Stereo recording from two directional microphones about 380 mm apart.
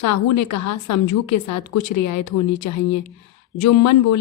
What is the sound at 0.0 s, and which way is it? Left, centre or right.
A woman's voice, left.